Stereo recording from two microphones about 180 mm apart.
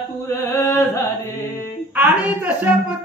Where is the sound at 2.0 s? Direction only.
10° right (ahead or behind).